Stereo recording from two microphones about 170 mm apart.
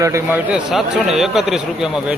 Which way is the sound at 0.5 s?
Centre (ahead or behind).